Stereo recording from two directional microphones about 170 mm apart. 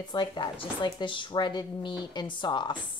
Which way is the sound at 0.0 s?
25° left (ahead or behind).